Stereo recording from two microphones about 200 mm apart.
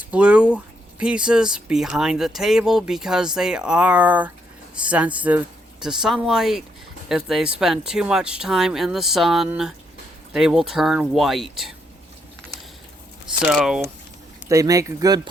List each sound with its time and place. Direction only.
0.0 s speech: 5° right (ahead or behind)
13.4 s speech: 5° right (ahead or behind)
14.5 s speech: 15° right (ahead or behind)